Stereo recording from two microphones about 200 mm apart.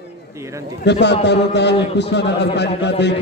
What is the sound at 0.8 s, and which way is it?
A man's voice, 60° left (ahead or behind).